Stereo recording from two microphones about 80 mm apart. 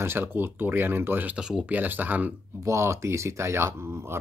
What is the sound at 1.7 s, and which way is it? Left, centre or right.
Speech, right.